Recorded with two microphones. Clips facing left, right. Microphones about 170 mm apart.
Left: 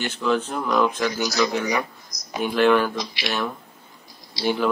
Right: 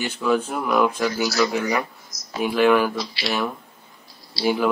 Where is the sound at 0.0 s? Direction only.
10° right (ahead or behind).